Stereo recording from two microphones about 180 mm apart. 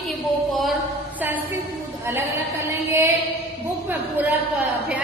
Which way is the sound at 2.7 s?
15° right (ahead or behind).